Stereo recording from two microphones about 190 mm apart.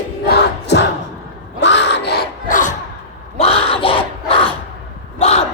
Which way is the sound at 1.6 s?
65° left (ahead or behind).